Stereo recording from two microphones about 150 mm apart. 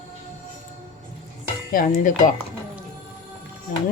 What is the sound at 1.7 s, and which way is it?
Speech, 60° left (ahead or behind).